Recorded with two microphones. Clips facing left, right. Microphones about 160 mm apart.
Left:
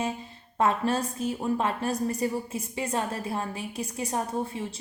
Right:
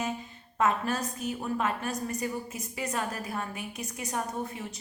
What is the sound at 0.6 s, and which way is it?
A woman's voice, 30° left (ahead or behind).